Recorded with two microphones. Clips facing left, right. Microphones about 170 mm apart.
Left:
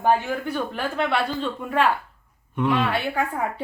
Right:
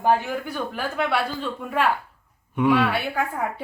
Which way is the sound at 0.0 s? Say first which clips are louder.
Even; 5° right (ahead or behind).